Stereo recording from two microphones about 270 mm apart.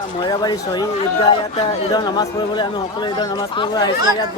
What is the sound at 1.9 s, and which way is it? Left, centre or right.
Speech, centre.